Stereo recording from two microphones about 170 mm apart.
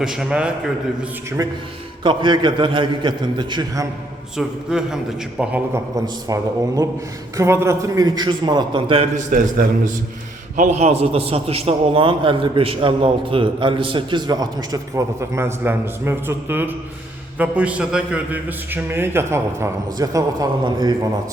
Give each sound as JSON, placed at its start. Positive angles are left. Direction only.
{"t": 0.0, "sound": "a man's voice", "side_deg": -5}
{"t": 1.4, "sound": "a man's voice", "side_deg": -20}
{"t": 4.4, "sound": "a man's voice", "side_deg": -5}
{"t": 6.2, "sound": "a man's voice", "side_deg": -20}
{"t": 9.1, "sound": "a man's voice", "side_deg": -50}
{"t": 10.6, "sound": "a man's voice", "side_deg": -40}